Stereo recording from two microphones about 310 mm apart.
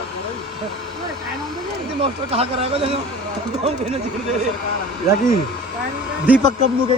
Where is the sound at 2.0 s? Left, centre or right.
Centre.